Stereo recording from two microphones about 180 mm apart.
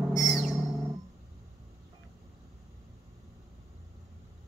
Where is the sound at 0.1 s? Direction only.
5° right (ahead or behind).